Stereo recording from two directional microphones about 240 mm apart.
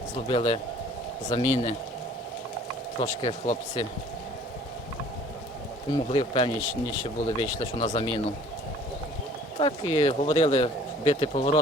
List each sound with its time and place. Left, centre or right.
0.3 s speech: left
3.0 s speech: left
5.9 s speech: left
9.6 s speech: left